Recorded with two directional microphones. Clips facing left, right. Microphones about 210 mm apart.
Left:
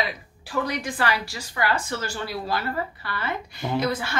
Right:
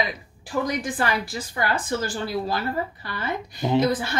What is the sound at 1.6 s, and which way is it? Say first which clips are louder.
Speech: right 1 dB; 50° right (ahead or behind).